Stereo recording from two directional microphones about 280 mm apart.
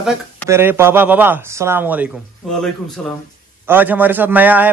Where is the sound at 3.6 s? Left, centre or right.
Centre.